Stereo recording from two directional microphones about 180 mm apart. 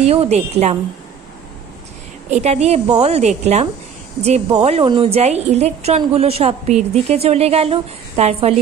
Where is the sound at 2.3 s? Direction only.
40° right (ahead or behind).